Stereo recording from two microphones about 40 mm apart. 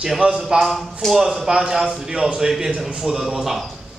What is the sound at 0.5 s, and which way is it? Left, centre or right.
A man's voice, centre.